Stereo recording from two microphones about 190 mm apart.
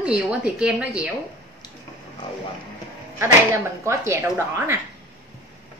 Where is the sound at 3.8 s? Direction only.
15° right (ahead or behind).